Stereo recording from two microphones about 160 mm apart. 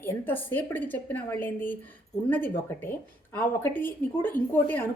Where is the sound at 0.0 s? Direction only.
10° left (ahead or behind).